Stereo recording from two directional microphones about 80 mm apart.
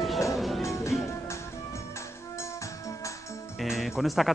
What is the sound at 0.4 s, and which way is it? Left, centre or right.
Music, centre.